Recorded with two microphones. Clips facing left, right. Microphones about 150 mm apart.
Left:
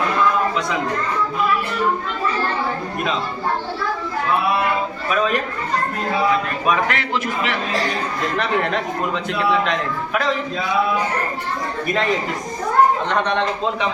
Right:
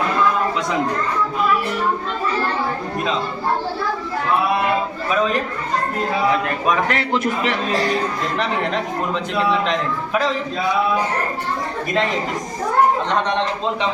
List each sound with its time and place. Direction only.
6.8 s a man's voice: 40° right (ahead or behind)